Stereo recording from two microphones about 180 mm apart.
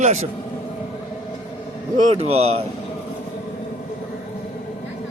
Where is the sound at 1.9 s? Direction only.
40° right (ahead or behind).